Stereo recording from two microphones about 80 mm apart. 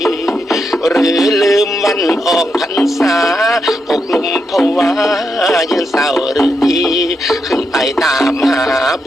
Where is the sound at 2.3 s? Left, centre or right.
Centre.